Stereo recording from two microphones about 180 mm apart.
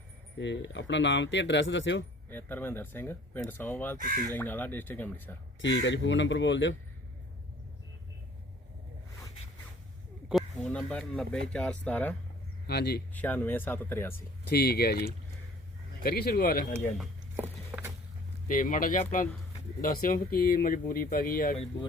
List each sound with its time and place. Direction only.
0.3 s speech: 80° left
2.3 s speech: 10° left (ahead or behind)
3.9 s speech: 50° right (ahead or behind)
4.4 s speech: 10° left (ahead or behind)
5.6 s speech: 85° left
10.7 s speech: 5° left (ahead or behind)
12.6 s speech: 65° left (ahead or behind)
13.1 s speech: 10° left (ahead or behind)
14.4 s speech: 60° left (ahead or behind)
17.3 s a sound: 10° right (ahead or behind)
18.4 s speech: 50° left (ahead or behind)